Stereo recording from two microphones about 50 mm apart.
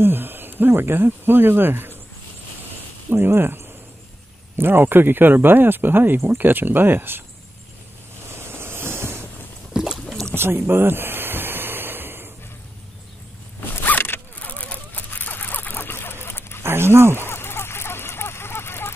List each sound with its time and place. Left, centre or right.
0.0 s speech: right
3.1 s speech: right
8.4 s vehicle: right
10.0 s boat: centre
10.3 s a sound: right
13.8 s zipper: left
14.5 s rodents: left
16.6 s speech: right
17.3 s a sound: left